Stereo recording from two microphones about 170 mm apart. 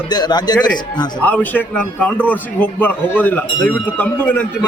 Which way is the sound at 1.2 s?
10° left (ahead or behind).